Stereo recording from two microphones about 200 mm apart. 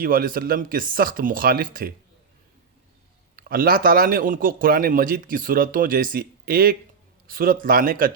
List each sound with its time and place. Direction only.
0.0 s a man's voice: 45° right (ahead or behind)
3.3 s a man's voice: 45° right (ahead or behind)